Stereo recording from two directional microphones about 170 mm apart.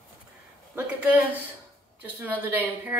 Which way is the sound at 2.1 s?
10° right (ahead or behind).